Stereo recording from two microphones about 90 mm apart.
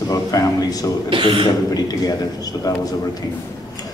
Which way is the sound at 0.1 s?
40° left (ahead or behind).